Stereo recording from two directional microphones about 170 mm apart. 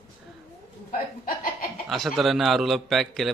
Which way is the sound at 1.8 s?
Centre (ahead or behind).